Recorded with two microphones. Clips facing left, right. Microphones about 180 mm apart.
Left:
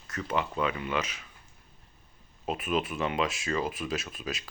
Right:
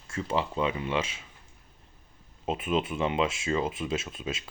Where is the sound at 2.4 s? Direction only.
25° right (ahead or behind).